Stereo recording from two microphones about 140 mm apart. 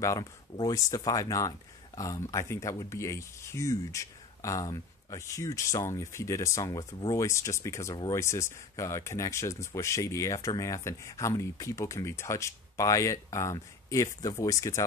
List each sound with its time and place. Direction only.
0.0 s speech: 25° left (ahead or behind)